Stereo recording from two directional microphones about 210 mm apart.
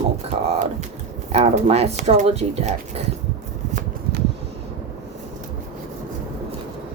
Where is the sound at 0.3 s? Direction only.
30° right (ahead or behind).